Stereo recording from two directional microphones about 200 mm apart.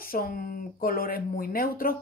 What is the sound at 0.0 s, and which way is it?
Speech, 45° left (ahead or behind).